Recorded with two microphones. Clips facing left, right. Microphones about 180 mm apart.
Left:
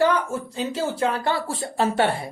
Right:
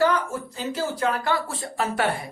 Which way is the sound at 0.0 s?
25° left (ahead or behind).